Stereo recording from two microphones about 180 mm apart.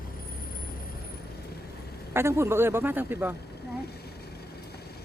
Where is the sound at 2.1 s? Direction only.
15° right (ahead or behind).